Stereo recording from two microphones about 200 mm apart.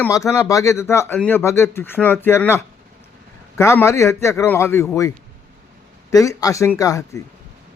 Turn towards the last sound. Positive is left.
turn(degrees=15)  # may be behind; listen again after turning